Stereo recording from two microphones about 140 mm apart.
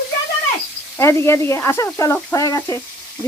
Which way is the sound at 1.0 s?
20° left (ahead or behind).